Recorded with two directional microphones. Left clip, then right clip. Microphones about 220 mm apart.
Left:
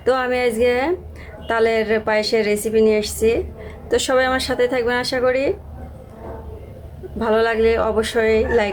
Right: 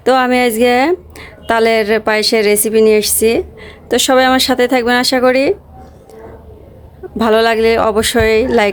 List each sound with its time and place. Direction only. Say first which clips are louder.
0.0 s a woman's voice: right 7 dB; 45° right (ahead or behind)
7.2 s a woman's voice: right 6 dB; 50° right (ahead or behind)